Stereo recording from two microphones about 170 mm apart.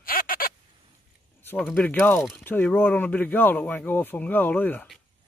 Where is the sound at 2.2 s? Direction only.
Centre (ahead or behind).